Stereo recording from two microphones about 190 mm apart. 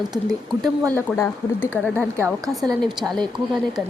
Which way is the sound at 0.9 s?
10° left (ahead or behind).